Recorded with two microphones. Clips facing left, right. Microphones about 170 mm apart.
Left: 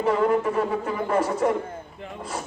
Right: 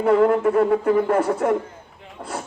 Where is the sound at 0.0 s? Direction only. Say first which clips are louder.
Right 5 dB; 55° right (ahead or behind).